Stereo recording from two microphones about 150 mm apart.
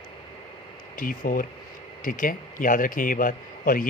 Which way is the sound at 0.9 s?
65° left (ahead or behind).